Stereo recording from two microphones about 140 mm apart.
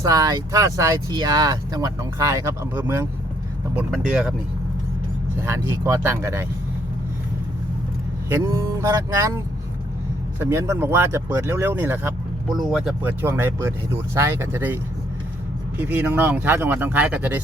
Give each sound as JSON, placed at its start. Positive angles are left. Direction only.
{"t": 0.0, "sound": "speech", "side_deg": -25}
{"t": 4.1, "sound": "speech", "side_deg": -10}
{"t": 5.4, "sound": "speech", "side_deg": -20}
{"t": 8.3, "sound": "speech", "side_deg": -20}
{"t": 10.5, "sound": "speech", "side_deg": -20}
{"t": 12.5, "sound": "speech", "side_deg": 0}
{"t": 13.0, "sound": "speech", "side_deg": -15}
{"t": 15.8, "sound": "speech", "side_deg": -15}